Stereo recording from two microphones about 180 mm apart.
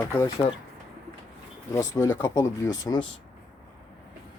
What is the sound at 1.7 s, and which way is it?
Speech, 15° left (ahead or behind).